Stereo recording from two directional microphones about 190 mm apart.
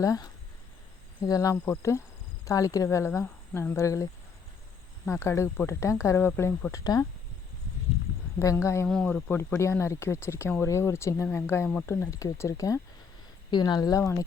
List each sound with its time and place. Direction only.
0.0 s speech: 20° left (ahead or behind)
8.4 s speech: 15° left (ahead or behind)